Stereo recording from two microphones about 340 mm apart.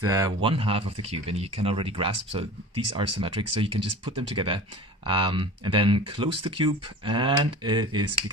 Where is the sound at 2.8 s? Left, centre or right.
Right.